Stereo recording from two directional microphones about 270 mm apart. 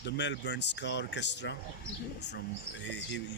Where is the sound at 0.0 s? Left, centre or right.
Left.